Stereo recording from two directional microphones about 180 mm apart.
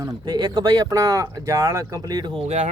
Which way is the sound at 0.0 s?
25° right (ahead or behind).